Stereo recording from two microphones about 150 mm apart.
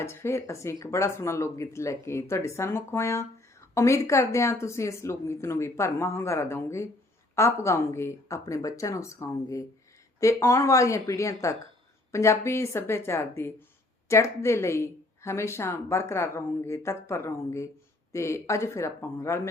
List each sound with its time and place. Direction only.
0.0 s speech: 20° left (ahead or behind)